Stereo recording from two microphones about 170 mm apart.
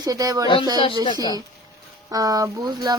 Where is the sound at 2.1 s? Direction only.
20° right (ahead or behind).